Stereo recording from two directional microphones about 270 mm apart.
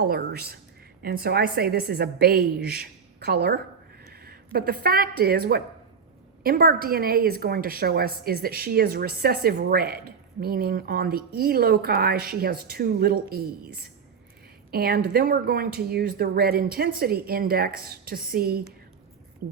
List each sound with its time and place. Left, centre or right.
0.1 s a woman's voice: right
14.7 s a woman's voice: right